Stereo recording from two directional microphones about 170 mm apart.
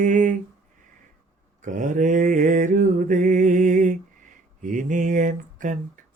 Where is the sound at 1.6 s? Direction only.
50° right (ahead or behind).